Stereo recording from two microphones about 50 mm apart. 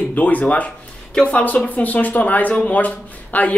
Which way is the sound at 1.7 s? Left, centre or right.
Left.